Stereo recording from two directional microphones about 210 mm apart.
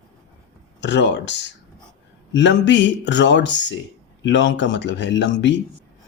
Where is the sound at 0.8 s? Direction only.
55° left (ahead or behind).